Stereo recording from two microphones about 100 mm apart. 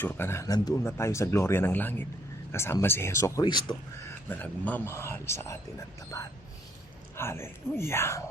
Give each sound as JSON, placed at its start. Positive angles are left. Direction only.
{"t": 0.0, "sound": "speech", "side_deg": 20}
{"t": 3.4, "sound": "speech", "side_deg": 50}
{"t": 4.3, "sound": "speech", "side_deg": 15}
{"t": 6.1, "sound": "speech", "side_deg": 35}
{"t": 7.2, "sound": "speech", "side_deg": 25}